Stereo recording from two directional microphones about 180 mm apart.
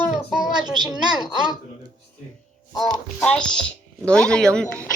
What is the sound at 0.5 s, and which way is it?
A woman's voice, 25° right (ahead or behind).